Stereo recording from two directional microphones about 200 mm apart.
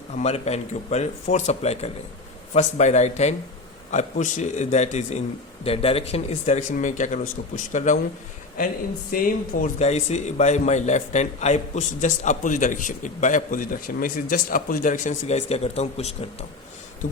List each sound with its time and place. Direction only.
0.2 s speech: 30° left (ahead or behind)
9.1 s speech: 40° left (ahead or behind)